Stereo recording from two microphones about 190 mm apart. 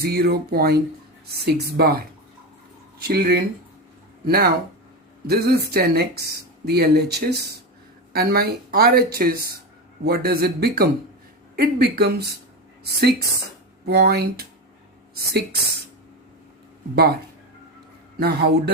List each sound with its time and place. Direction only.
0.0 s speech: 55° right (ahead or behind)
3.0 s speech: 55° right (ahead or behind)
16.9 s speech: 55° right (ahead or behind)
18.2 s speech: 55° right (ahead or behind)